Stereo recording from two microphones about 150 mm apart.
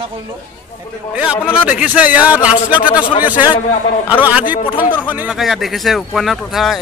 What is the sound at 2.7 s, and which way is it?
Speech, 30° left (ahead or behind).